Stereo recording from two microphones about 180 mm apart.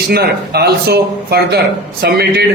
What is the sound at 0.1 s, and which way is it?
A man's voice, 60° right (ahead or behind).